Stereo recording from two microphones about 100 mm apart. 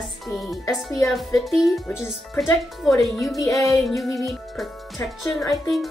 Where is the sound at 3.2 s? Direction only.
35° left (ahead or behind).